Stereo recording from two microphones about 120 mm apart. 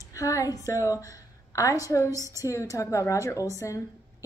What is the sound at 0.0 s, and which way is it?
A woman's voice, 25° left (ahead or behind).